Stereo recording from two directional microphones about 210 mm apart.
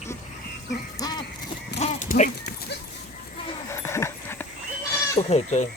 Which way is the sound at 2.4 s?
50° left (ahead or behind).